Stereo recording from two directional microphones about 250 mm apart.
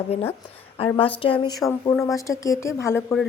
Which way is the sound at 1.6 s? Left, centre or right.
Centre.